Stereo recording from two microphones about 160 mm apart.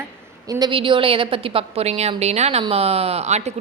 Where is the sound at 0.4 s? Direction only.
30° right (ahead or behind).